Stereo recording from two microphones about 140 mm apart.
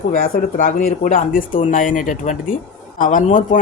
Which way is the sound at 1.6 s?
60° left (ahead or behind).